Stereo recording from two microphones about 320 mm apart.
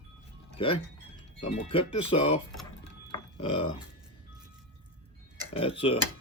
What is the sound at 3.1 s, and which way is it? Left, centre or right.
Dishes, centre.